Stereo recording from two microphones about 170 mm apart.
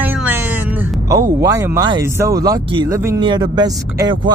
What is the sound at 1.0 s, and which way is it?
Speech, 20° right (ahead or behind).